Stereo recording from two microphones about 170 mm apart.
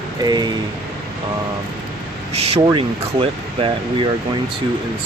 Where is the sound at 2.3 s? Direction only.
35° right (ahead or behind).